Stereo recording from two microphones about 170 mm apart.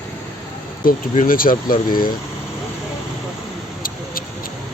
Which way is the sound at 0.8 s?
50° left (ahead or behind).